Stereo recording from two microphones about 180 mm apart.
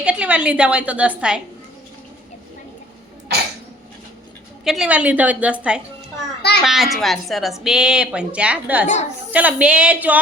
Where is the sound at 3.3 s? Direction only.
65° right (ahead or behind).